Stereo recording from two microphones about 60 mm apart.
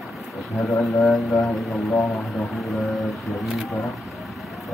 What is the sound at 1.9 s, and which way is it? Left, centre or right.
Speech, left.